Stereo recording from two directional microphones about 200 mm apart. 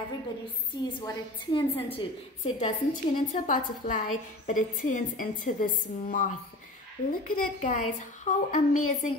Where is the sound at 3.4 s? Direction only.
40° left (ahead or behind).